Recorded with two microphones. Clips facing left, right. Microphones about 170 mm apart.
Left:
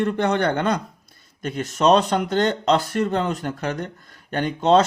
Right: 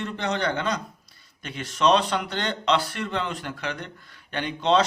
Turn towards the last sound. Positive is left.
turn(degrees=45)  # may be behind; listen again after turning